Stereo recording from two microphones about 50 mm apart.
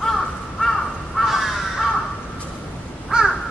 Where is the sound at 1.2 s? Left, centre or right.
Centre.